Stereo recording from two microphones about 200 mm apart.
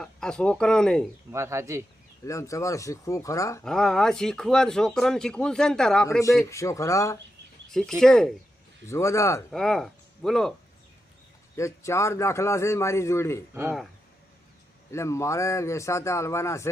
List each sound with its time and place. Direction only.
0.0 s speech: 5° left (ahead or behind)
1.3 s speech: 15° right (ahead or behind)
2.2 s a man's voice: 15° left (ahead or behind)
3.6 s speech: centre (ahead or behind)
6.1 s a man's voice: 15° left (ahead or behind)
7.7 s speech: centre (ahead or behind)
8.9 s a man's voice: 15° left (ahead or behind)
9.5 s speech: centre (ahead or behind)
11.5 s a man's voice: 15° left (ahead or behind)
13.5 s speech: 10° right (ahead or behind)
14.9 s a man's voice: 15° left (ahead or behind)